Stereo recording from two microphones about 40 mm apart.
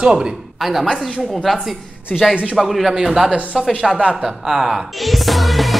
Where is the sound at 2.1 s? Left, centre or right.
Left.